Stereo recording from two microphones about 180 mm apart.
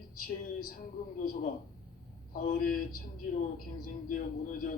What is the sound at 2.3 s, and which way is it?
Speech, 50° left (ahead or behind).